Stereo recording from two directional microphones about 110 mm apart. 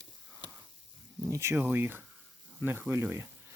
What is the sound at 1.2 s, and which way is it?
Speech, 25° right (ahead or behind).